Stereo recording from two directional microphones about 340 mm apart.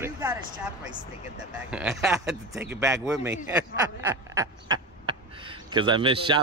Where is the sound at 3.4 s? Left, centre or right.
Centre.